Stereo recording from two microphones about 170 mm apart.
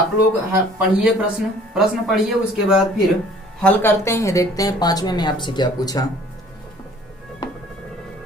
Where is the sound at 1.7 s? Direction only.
Centre (ahead or behind).